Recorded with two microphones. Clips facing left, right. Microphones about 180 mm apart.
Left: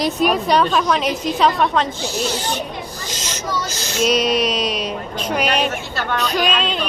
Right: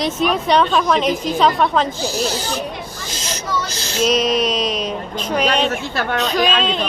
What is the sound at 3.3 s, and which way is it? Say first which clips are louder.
Snake: right 1 dB; 35° right (ahead or behind).